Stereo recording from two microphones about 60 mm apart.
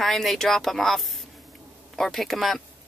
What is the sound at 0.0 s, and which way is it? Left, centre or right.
Speech, centre.